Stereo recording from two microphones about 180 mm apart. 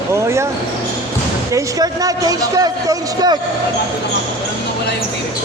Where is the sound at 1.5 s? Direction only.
20° right (ahead or behind).